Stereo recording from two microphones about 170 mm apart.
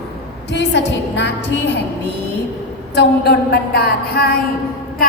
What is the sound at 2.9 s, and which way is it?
A woman's voice, 70° left (ahead or behind).